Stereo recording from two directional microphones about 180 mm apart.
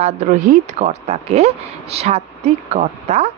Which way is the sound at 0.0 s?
40° right (ahead or behind).